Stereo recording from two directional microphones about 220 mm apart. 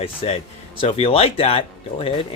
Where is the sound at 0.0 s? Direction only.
25° left (ahead or behind).